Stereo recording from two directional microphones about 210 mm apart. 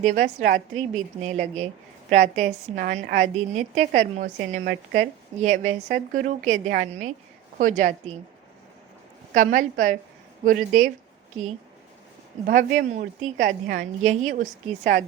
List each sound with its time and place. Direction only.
0.0 s a woman's voice: 35° right (ahead or behind)
9.3 s a woman's voice: 40° right (ahead or behind)
12.5 s a woman's voice: 40° right (ahead or behind)